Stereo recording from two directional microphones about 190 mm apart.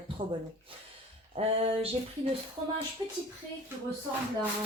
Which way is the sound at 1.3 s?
30° right (ahead or behind).